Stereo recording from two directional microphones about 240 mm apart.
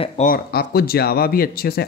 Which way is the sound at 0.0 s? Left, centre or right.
Left.